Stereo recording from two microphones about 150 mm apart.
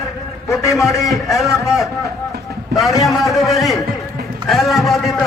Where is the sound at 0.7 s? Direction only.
Centre (ahead or behind).